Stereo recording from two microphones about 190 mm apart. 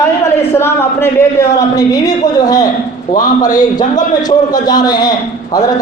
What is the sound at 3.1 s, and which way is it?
Speech, 45° left (ahead or behind).